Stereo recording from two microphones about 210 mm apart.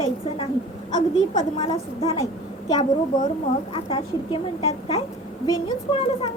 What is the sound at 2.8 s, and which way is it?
Speech, 40° left (ahead or behind).